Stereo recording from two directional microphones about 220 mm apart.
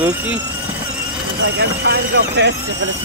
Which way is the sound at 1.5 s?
50° right (ahead or behind).